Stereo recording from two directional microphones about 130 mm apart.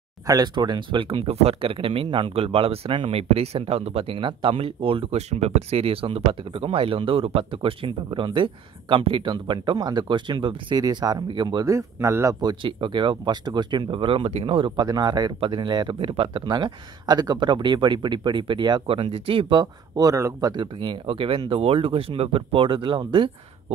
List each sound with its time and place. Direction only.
0.3 s speech: 30° right (ahead or behind)
11.6 s speech: 25° right (ahead or behind); by 14.9 s 40° right (ahead or behind)
14.9 s speech: 30° right (ahead or behind)